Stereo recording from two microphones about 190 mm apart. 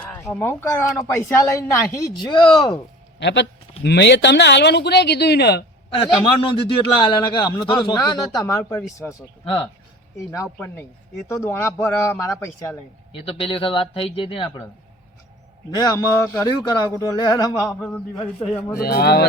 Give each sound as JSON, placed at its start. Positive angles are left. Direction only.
{"t": 0.0, "sound": "speech", "side_deg": 5}
{"t": 3.2, "sound": "speech", "side_deg": 65}
{"t": 6.2, "sound": "speech", "side_deg": 30}
{"t": 9.4, "sound": "speech", "side_deg": 30}
{"t": 10.3, "sound": "speech", "side_deg": 15}
{"t": 13.2, "sound": "speech", "side_deg": 30}
{"t": 15.8, "sound": "speech", "side_deg": 20}
{"t": 17.7, "sound": "a man's voice", "side_deg": 5}
{"t": 18.3, "sound": "speech", "side_deg": 15}
{"t": 18.8, "sound": "speech", "side_deg": 55}